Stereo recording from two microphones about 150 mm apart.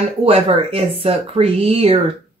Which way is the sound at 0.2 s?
40° right (ahead or behind).